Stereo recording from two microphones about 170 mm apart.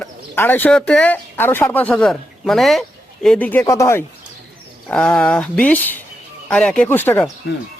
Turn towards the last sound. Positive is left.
turn(degrees=10)  # may be behind; listen again after turning